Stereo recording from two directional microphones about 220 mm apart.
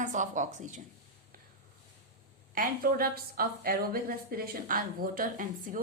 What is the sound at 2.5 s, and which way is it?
A woman's voice, 40° right (ahead or behind).